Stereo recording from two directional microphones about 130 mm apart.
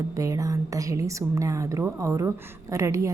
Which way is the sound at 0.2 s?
25° right (ahead or behind).